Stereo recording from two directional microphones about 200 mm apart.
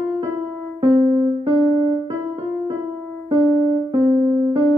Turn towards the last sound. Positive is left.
turn(degrees=-20)  # may be behind; listen again after turning